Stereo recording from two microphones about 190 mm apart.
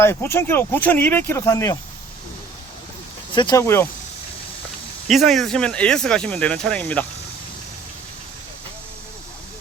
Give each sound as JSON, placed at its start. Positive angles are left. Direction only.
{"t": 0.0, "sound": "speech", "side_deg": 15}
{"t": 3.3, "sound": "speech", "side_deg": 20}
{"t": 5.0, "sound": "speech", "side_deg": 0}